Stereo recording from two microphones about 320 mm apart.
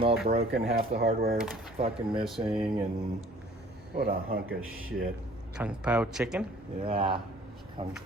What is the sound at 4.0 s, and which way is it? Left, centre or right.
Speech, right.